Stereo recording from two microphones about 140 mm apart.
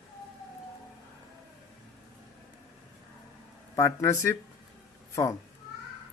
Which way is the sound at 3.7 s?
20° left (ahead or behind).